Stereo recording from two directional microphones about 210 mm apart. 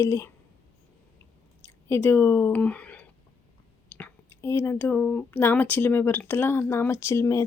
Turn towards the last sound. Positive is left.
turn(degrees=15)  # may be behind; listen again after turning